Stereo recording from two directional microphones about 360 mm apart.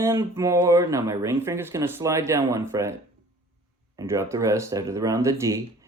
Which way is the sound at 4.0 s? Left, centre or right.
Centre.